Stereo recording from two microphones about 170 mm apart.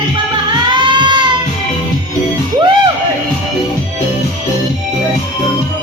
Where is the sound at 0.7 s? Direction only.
25° right (ahead or behind).